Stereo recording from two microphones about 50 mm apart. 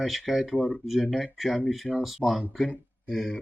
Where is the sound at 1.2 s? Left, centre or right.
Centre.